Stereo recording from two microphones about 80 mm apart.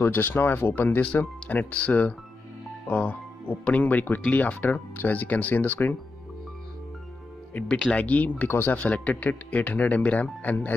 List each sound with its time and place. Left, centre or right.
0.0 s speech: left
7.6 s speech: centre